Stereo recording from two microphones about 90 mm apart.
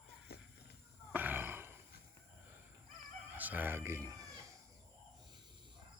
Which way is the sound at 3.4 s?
20° right (ahead or behind).